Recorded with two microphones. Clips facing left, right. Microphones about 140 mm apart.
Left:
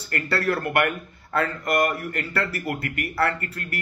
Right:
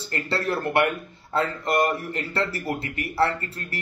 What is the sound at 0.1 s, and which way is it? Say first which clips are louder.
A man's voice: left 2 dB; 25° right (ahead or behind).